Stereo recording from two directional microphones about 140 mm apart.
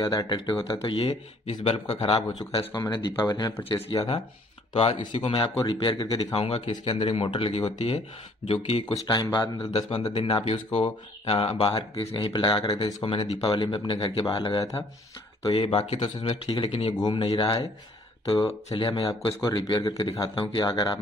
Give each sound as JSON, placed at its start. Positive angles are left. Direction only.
{"t": 0.0, "sound": "speech", "side_deg": 30}
{"t": 2.7, "sound": "speech", "side_deg": 30}
{"t": 8.9, "sound": "speech", "side_deg": 30}
{"t": 9.7, "sound": "speech", "side_deg": 40}
{"t": 15.4, "sound": "speech", "side_deg": 35}
{"t": 18.7, "sound": "speech", "side_deg": 40}
{"t": 19.4, "sound": "speech", "side_deg": 25}